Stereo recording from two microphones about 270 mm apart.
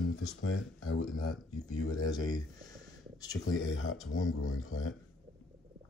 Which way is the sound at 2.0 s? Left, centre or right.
Centre.